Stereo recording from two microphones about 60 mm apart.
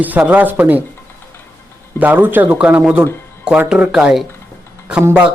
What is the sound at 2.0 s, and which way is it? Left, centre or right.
Speech, right.